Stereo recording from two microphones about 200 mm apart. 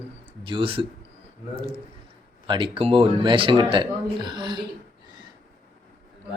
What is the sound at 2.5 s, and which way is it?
Speech, 25° right (ahead or behind).